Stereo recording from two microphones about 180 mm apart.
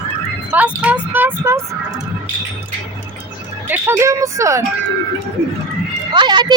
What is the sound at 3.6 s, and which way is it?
Speech, 10° right (ahead or behind).